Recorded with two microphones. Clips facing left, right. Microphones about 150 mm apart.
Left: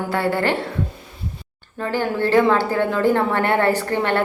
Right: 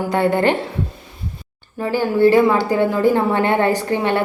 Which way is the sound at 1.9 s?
10° right (ahead or behind).